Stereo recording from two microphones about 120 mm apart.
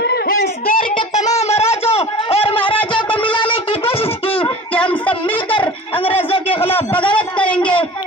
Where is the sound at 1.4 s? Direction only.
60° left (ahead or behind).